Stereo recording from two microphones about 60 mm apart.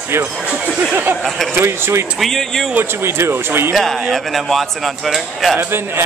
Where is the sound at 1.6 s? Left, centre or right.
Right.